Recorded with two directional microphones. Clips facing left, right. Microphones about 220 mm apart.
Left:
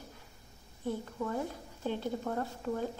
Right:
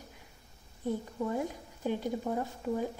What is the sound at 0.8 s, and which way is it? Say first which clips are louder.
A woman's voice: right 2 dB; 15° right (ahead or behind).